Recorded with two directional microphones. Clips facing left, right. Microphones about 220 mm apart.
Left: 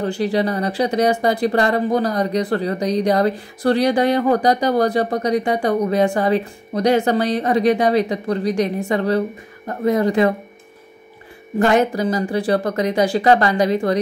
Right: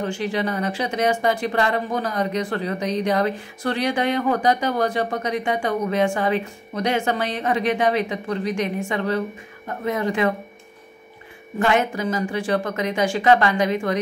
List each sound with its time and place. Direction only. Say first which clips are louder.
0.0 s speech: left 5 dB; 35° left (ahead or behind)
11.6 s speech: left 5 dB; 35° left (ahead or behind)